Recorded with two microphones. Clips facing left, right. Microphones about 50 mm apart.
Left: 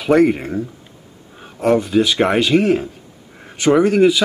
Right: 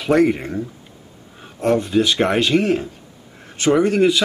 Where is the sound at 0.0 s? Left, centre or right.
Centre.